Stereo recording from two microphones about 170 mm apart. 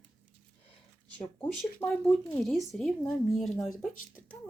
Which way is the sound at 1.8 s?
15° left (ahead or behind).